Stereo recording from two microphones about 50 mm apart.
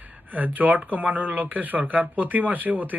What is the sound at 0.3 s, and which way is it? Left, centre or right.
Speech, right.